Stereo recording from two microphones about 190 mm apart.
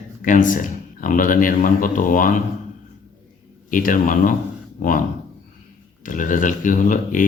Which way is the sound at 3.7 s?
45° left (ahead or behind).